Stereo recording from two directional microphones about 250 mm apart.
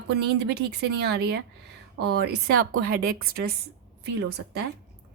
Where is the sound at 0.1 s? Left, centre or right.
Right.